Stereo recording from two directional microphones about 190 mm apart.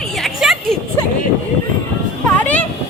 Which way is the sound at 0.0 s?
Centre (ahead or behind).